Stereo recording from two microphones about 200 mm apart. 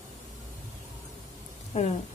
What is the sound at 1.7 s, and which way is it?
Speech, 35° left (ahead or behind).